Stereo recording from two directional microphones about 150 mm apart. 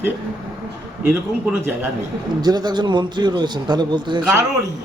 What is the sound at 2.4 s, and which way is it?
A man's voice, 30° right (ahead or behind).